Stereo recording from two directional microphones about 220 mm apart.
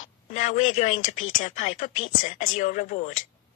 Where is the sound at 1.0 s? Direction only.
65° left (ahead or behind).